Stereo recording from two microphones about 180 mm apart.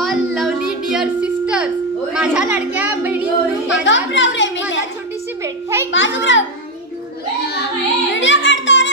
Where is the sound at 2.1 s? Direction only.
5° right (ahead or behind).